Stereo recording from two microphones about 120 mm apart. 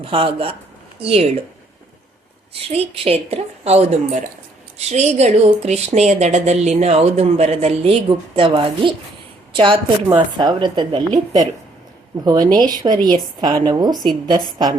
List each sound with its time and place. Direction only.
0.0 s speech: 50° right (ahead or behind)
2.5 s a woman's voice: 55° right (ahead or behind)
12.2 s a woman's voice: 35° right (ahead or behind)